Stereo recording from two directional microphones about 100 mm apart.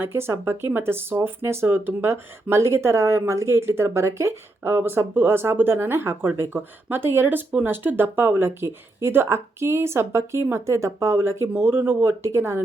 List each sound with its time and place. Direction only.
0.0 s speech: 25° right (ahead or behind)